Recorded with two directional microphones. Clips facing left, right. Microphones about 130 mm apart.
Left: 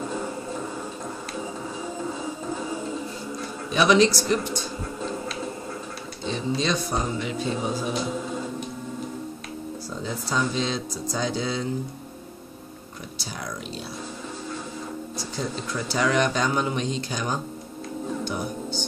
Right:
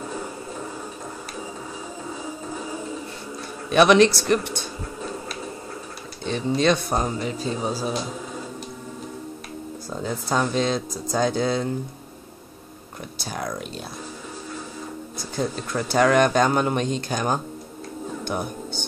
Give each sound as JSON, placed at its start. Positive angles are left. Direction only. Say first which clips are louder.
{"t": 3.7, "sound": "a man's voice", "louder": "right 4 dB", "side_deg": -60}
{"t": 6.2, "sound": "speech", "louder": "right 5 dB", "side_deg": -60}
{"t": 10.0, "sound": "speech", "louder": "right 3 dB", "side_deg": -50}
{"t": 13.2, "sound": "speech", "louder": "right 6 dB", "side_deg": -50}
{"t": 15.1, "sound": "speech", "louder": "right 5 dB", "side_deg": -50}